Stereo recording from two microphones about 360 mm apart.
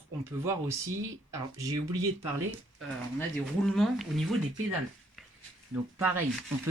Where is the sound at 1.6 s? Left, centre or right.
Centre.